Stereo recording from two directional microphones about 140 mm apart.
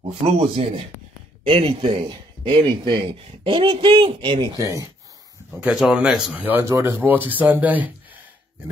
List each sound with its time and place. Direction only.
0.2 s speech: 50° right (ahead or behind)
4.6 s speech: 25° right (ahead or behind)
5.6 s speech: 5° right (ahead or behind)